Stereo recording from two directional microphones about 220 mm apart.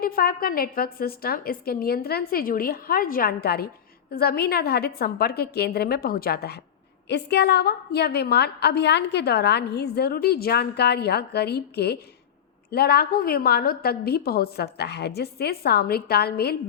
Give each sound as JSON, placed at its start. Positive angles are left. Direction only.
{"t": 0.0, "sound": "a woman's voice", "side_deg": 40}